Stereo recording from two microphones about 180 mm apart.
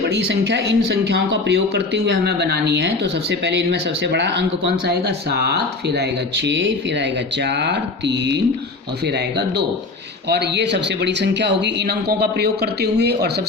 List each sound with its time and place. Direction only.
0.4 s speech: 70° right (ahead or behind)
10.2 s speech: 70° right (ahead or behind)